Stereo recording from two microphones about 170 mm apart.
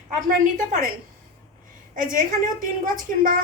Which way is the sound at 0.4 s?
50° right (ahead or behind).